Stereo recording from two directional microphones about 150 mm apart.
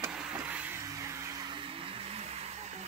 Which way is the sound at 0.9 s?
20° right (ahead or behind).